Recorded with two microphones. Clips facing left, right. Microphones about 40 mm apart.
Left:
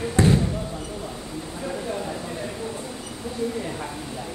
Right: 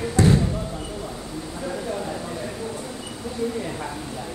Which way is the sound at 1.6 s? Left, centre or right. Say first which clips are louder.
Right 1 dB; centre.